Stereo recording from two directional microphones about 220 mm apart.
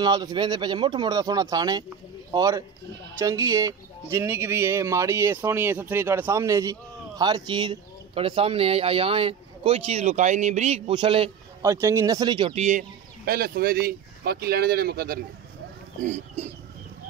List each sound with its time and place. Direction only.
0.0 s a man's voice: 20° right (ahead or behind)
11.7 s speech: 15° right (ahead or behind); by 15.1 s 45° right (ahead or behind)